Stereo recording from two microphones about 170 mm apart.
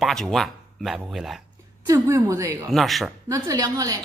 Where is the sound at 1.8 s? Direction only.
20° right (ahead or behind).